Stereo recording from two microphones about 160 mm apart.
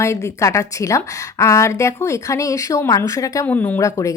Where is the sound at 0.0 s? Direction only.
20° left (ahead or behind).